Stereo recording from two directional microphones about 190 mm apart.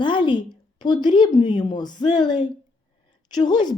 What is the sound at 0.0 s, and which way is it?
A woman's voice, 25° left (ahead or behind).